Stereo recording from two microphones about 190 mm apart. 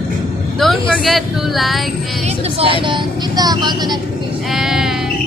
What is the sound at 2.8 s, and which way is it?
Speech, 25° right (ahead or behind).